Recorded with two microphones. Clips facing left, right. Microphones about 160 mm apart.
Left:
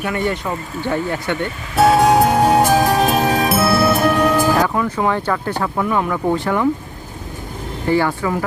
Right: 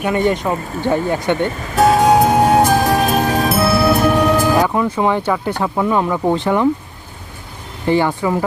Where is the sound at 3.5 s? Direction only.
Centre (ahead or behind).